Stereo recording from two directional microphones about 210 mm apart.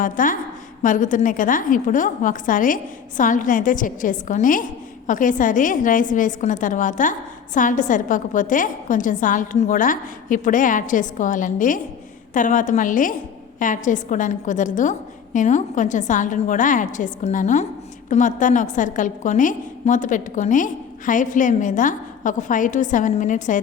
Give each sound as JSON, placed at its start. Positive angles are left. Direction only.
{"t": 0.0, "sound": "a woman's voice", "side_deg": 40}